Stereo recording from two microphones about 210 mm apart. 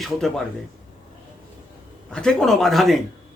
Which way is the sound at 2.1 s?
5° left (ahead or behind).